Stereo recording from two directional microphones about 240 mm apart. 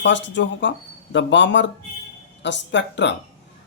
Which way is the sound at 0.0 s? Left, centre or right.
Left.